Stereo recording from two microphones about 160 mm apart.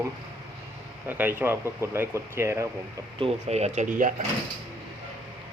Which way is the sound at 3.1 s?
40° right (ahead or behind).